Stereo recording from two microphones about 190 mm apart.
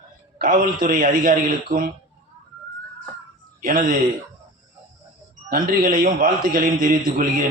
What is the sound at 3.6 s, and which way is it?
Speech, 45° right (ahead or behind).